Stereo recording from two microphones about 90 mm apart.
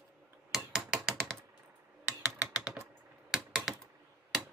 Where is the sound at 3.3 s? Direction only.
5° right (ahead or behind).